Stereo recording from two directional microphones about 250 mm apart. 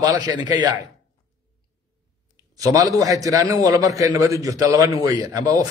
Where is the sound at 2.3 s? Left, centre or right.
Centre.